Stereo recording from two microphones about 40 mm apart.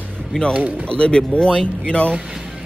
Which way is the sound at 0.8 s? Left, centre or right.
Left.